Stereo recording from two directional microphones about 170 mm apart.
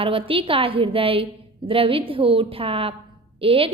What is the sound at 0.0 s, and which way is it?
A woman's voice, 30° right (ahead or behind).